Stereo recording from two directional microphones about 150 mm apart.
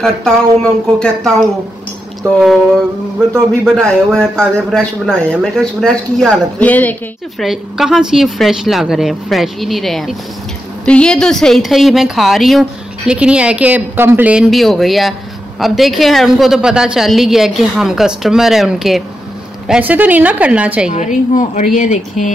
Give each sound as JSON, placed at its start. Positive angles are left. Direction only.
{"t": 0.0, "sound": "a woman's voice", "side_deg": 5}
{"t": 3.3, "sound": "a woman's voice", "side_deg": 5}
{"t": 7.3, "sound": "a woman's voice", "side_deg": -5}
{"t": 20.9, "sound": "a woman's voice", "side_deg": 55}